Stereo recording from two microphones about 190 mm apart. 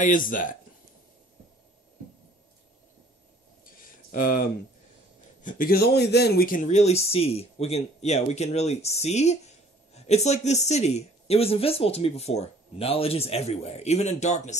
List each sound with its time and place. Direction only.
0.0 s speech: 45° left (ahead or behind)
3.6 s a sound: 45° left (ahead or behind)
5.4 s speech: 45° left (ahead or behind)